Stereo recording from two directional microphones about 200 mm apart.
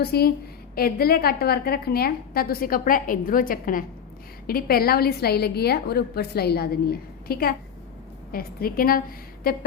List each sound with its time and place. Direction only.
0.0 s a woman's voice: 50° left (ahead or behind)